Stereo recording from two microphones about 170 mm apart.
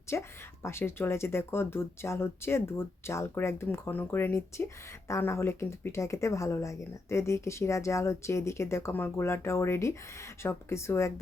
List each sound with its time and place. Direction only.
0.1 s speech: 15° left (ahead or behind)